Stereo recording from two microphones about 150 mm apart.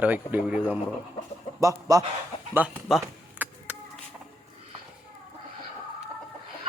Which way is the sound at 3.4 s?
10° right (ahead or behind).